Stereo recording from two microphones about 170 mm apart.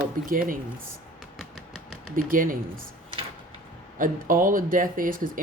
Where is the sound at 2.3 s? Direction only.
55° right (ahead or behind).